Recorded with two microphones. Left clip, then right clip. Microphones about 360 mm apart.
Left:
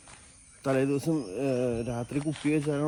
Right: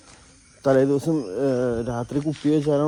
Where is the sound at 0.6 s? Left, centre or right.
Centre.